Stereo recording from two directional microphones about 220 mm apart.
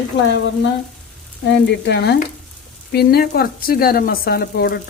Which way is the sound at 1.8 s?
50° left (ahead or behind).